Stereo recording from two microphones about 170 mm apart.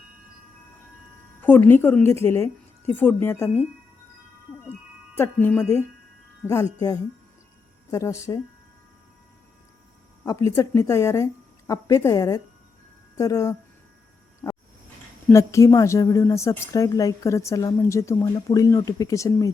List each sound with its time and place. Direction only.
1.4 s a woman's voice: 10° left (ahead or behind)
5.1 s a woman's voice: 10° left (ahead or behind)
10.2 s a woman's voice: 15° left (ahead or behind)
15.3 s a woman's voice: 15° left (ahead or behind)